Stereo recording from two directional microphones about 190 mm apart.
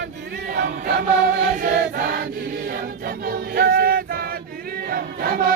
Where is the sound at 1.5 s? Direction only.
50° right (ahead or behind).